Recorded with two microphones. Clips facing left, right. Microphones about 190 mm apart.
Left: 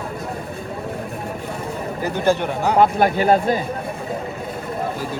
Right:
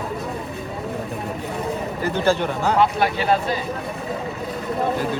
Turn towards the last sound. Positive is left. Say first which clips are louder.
# left 4 dB
turn(degrees=50)  # may be behind; listen again after turning